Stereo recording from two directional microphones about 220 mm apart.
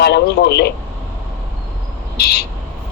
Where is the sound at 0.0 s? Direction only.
50° left (ahead or behind).